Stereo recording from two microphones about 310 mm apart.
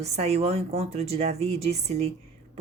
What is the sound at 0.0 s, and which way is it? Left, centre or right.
Speech, centre.